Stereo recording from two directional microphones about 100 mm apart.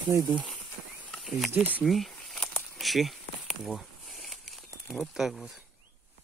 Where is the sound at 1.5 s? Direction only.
20° right (ahead or behind).